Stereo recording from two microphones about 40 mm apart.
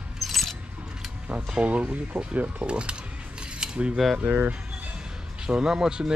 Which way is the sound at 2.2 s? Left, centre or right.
Right.